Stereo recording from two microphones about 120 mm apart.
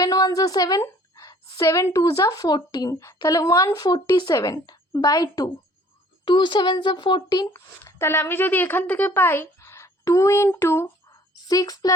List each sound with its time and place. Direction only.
0.0 s a woman's voice: 30° left (ahead or behind)
7.5 s a woman's voice: 20° left (ahead or behind)